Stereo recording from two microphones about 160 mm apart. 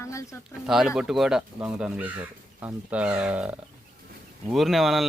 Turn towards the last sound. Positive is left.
turn(degrees=0)  # may be behind; listen again after turning